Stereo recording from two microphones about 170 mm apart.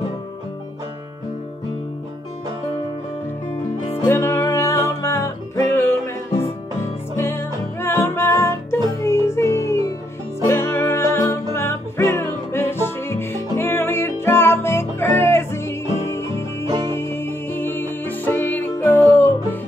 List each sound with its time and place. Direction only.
4.0 s music: 15° left (ahead or behind)